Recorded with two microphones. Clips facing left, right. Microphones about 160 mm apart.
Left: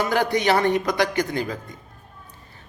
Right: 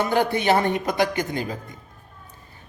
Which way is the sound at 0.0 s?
20° right (ahead or behind).